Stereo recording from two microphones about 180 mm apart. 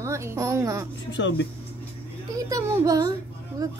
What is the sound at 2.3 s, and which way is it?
Speech, 20° right (ahead or behind).